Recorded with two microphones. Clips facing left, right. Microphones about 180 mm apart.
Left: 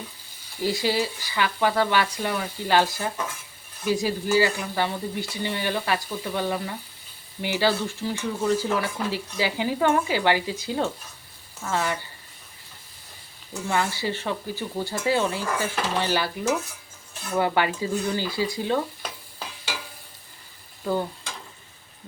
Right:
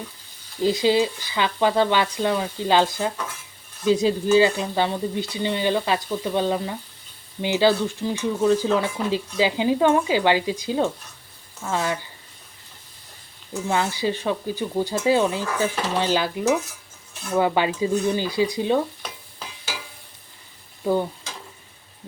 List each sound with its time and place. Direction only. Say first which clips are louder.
0.6 s speech: right 5 dB; 20° right (ahead or behind)
13.5 s speech: right 2 dB; 15° right (ahead or behind)
20.8 s stir: right 4 dB; 15° right (ahead or behind)